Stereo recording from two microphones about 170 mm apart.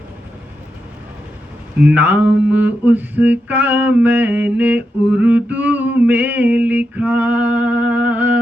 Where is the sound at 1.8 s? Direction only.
10° right (ahead or behind).